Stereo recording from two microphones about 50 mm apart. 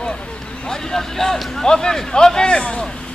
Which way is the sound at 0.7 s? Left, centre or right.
Centre.